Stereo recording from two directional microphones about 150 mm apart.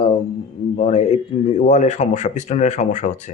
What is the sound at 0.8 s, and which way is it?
A man's voice, 45° left (ahead or behind).